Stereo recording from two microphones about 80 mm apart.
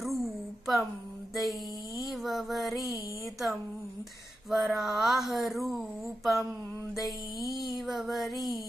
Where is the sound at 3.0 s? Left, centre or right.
Left.